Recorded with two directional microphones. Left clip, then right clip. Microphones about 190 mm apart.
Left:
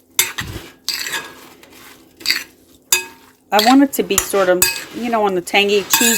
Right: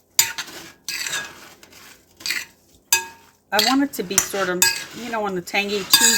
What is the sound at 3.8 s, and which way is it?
Cutlery, 45° left (ahead or behind).